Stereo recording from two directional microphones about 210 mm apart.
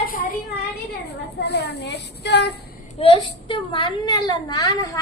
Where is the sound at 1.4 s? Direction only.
50° left (ahead or behind).